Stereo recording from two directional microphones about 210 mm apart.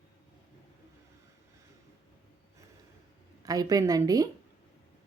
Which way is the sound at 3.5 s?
15° right (ahead or behind).